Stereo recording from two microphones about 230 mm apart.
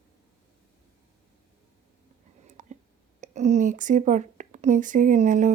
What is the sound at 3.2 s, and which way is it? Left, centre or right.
Speech, right.